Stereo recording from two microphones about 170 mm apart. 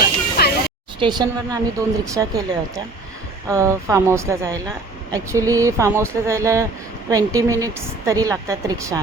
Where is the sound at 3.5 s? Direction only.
15° right (ahead or behind).